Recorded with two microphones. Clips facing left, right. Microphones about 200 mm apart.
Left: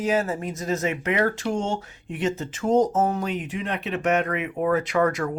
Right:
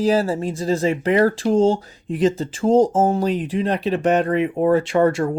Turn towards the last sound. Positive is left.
turn(degrees=-30)  # may be behind; listen again after turning